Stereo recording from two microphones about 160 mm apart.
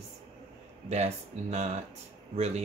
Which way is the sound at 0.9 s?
40° right (ahead or behind).